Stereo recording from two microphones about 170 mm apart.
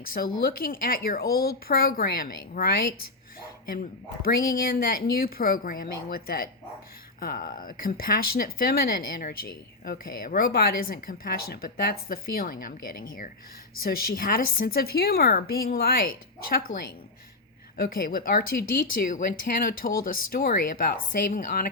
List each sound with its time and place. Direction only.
0.0 s speech: 60° left (ahead or behind)
4.2 s speech: 60° left (ahead or behind)
17.7 s speech: 60° left (ahead or behind)